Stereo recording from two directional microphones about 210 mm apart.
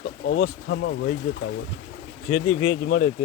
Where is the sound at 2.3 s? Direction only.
90° left.